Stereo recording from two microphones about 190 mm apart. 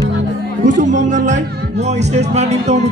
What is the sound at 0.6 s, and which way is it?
Speech, 40° right (ahead or behind).